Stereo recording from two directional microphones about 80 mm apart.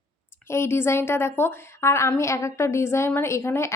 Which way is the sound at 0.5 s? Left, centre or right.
Left.